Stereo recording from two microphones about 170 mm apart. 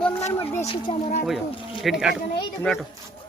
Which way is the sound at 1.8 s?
5° right (ahead or behind).